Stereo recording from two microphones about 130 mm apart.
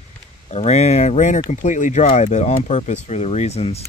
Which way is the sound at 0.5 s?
60° left (ahead or behind).